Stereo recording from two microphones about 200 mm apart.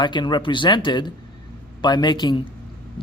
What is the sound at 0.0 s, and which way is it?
Speech, 20° left (ahead or behind).